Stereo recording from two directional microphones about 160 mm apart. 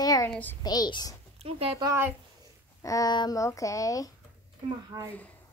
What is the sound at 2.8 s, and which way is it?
Speech, 20° left (ahead or behind).